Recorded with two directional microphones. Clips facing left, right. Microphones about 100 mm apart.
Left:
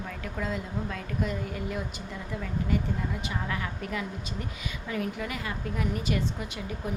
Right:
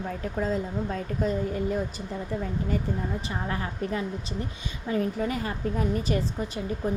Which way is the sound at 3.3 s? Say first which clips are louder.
Right 2 dB; 35° right (ahead or behind).